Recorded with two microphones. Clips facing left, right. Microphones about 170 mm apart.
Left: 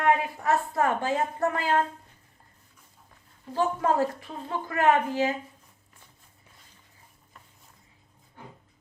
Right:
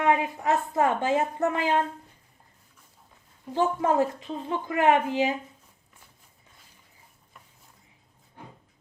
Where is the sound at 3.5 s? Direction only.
20° right (ahead or behind).